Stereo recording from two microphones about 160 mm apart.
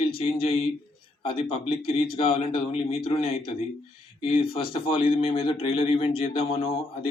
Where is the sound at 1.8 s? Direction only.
70° left (ahead or behind).